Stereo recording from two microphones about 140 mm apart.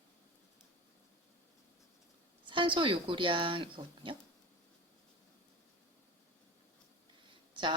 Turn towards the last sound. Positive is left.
turn(degrees=-35)  # may be behind; listen again after turning